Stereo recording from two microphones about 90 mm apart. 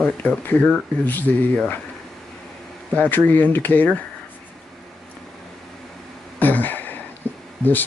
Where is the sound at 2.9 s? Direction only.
20° left (ahead or behind).